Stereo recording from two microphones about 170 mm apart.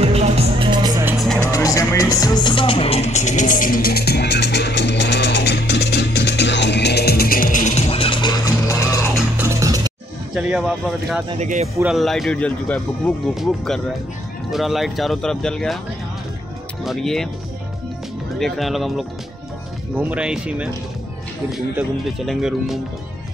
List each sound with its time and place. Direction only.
0.0 s music: 35° right (ahead or behind)
1.1 s music: centre (ahead or behind)
1.5 s music: 20° left (ahead or behind)
9.4 s music: 20° right (ahead or behind)
10.3 s speech: 5° right (ahead or behind)
11.3 s speech: 45° right (ahead or behind)
11.8 s speech: centre (ahead or behind)
16.8 s speech: centre (ahead or behind)
18.4 s speech: centre (ahead or behind)